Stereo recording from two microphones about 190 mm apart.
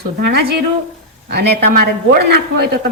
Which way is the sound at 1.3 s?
55° right (ahead or behind).